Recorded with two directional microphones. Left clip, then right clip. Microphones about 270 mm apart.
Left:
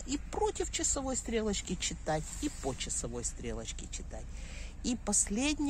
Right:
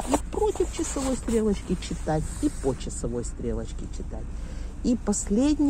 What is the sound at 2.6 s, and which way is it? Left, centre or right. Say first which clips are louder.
Speech: right 8 dB; centre.